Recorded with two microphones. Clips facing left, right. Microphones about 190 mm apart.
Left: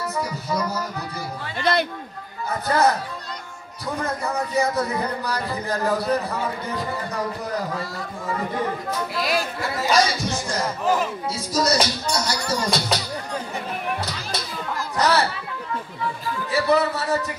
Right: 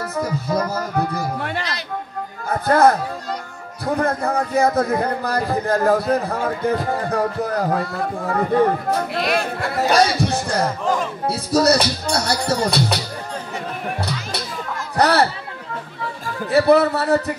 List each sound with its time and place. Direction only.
0.0 s music: 55° right (ahead or behind)
1.6 s music: 55° left (ahead or behind)
2.6 s a man's voice: 55° right (ahead or behind)
9.1 s speech: centre (ahead or behind)
9.4 s a man's voice: 60° right (ahead or behind)
15.0 s a man's voice: 65° right (ahead or behind)
16.4 s a man's voice: 60° right (ahead or behind)